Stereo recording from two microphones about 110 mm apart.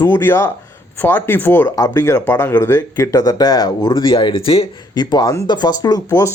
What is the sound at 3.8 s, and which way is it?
Speech, 50° left (ahead or behind).